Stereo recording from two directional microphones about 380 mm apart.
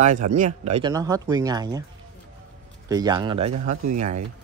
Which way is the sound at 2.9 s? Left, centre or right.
Centre.